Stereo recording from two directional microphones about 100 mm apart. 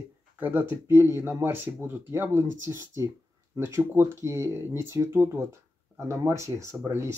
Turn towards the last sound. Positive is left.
turn(degrees=-30)  # may be behind; listen again after turning